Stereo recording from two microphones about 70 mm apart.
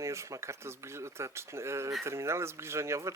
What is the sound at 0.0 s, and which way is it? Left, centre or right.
Speech, right.